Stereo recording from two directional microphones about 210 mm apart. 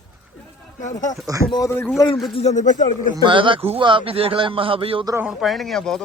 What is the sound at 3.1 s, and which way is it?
A man's voice, 25° right (ahead or behind).